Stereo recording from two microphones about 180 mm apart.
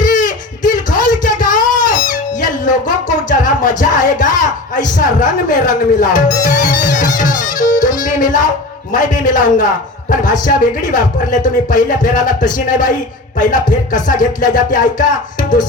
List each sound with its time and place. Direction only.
0.0 s a sound: 45° left (ahead or behind)
7.2 s music: 45° left (ahead or behind)
8.9 s speech: 45° left (ahead or behind)
10.9 s speech: 45° left (ahead or behind)